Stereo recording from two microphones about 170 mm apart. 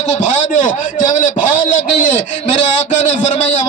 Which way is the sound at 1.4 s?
55° left (ahead or behind).